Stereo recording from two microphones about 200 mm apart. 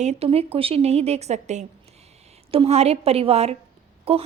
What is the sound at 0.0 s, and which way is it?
A woman's voice, 30° right (ahead or behind).